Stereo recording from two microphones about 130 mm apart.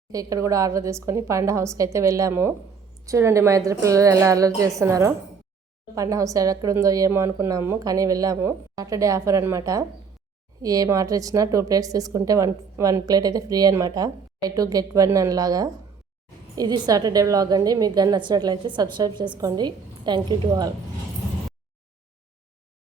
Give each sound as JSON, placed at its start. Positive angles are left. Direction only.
{"t": 0.1, "sound": "a woman's voice", "side_deg": -25}